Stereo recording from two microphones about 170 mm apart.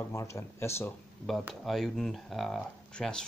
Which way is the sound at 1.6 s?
Centre (ahead or behind).